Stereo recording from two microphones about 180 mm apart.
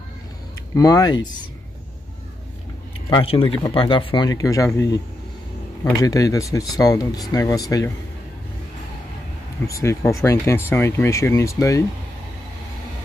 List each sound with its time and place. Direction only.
0.7 s speech: 20° left (ahead or behind)
3.1 s speech: 30° left (ahead or behind)
6.0 s speech: 20° left (ahead or behind)
9.7 s speech: 15° left (ahead or behind)